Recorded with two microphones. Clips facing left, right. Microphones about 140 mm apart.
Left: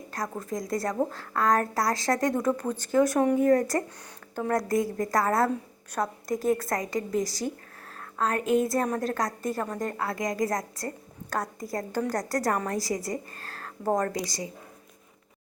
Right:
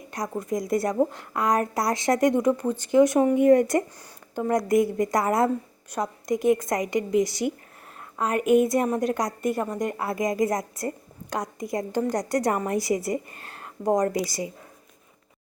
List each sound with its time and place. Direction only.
0.1 s a woman's voice: 20° right (ahead or behind)
14.3 s a woman's voice: 25° right (ahead or behind)